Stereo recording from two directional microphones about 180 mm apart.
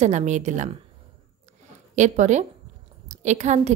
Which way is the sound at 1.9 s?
40° right (ahead or behind).